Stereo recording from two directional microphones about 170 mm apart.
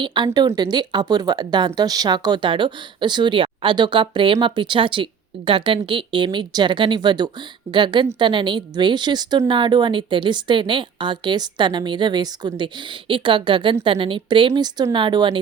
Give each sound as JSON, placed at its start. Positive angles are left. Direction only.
{"t": 0.0, "sound": "a woman's voice", "side_deg": -30}